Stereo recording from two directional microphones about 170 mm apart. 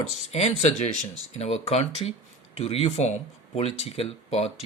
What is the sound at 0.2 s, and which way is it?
Speech, 40° left (ahead or behind).